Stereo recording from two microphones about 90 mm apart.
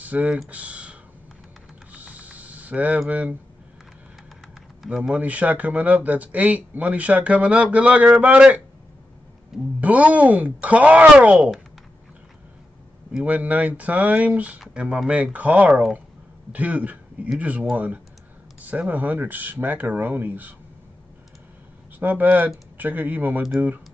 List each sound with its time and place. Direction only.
0.0 s speech: 15° right (ahead or behind)
0.5 s computer keyboard: 15° right (ahead or behind)
1.9 s a sound: 15° right (ahead or behind)
3.1 s speech: 15° right (ahead or behind)
4.8 s speech: 10° right (ahead or behind)
9.8 s speech: 15° right (ahead or behind)
13.2 s speech: 15° right (ahead or behind)
15.7 s speech: 5° right (ahead or behind)
16.5 s speech: 15° right (ahead or behind)
22.0 s speech: 20° right (ahead or behind)